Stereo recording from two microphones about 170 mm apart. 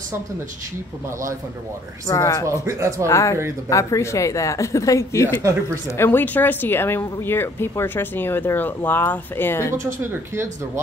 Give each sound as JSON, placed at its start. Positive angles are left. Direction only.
{"t": 2.0, "sound": "a woman's voice", "side_deg": 20}
{"t": 2.4, "sound": "speech", "side_deg": -15}
{"t": 3.1, "sound": "speech", "side_deg": 15}
{"t": 9.8, "sound": "speech", "side_deg": -15}